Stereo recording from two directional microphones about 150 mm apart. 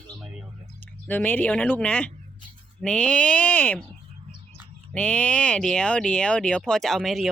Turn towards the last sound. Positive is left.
turn(degrees=0)  # may be behind; listen again after turning